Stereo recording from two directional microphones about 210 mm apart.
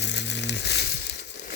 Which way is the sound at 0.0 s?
55° left (ahead or behind).